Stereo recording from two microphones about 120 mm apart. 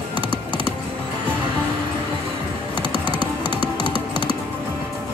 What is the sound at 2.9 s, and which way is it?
Typing, 40° left (ahead or behind).